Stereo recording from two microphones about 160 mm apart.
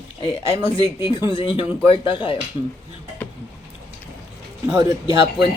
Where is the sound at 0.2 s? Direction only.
30° left (ahead or behind).